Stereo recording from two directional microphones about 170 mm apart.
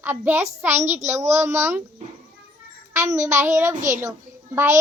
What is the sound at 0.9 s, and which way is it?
Speech, 40° right (ahead or behind).